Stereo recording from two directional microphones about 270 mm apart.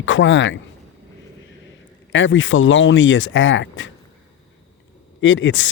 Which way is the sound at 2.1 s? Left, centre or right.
Left.